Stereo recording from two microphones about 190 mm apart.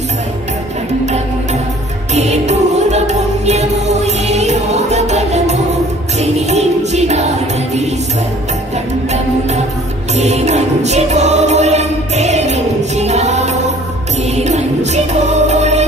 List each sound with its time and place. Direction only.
1.0 s music: 35° right (ahead or behind)
10.1 s music: 35° right (ahead or behind)